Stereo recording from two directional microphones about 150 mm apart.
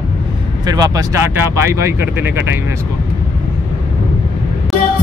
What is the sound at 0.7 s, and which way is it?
Speech, 25° right (ahead or behind).